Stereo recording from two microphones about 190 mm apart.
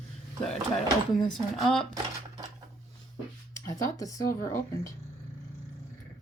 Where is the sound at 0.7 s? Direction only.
Centre (ahead or behind).